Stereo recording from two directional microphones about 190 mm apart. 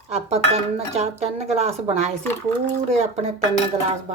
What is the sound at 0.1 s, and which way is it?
Speech, 35° right (ahead or behind).